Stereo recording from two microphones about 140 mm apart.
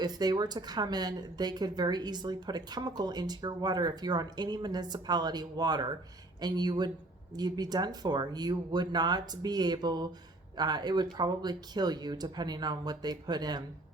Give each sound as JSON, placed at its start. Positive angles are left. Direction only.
{"t": 0.0, "sound": "speech", "side_deg": -30}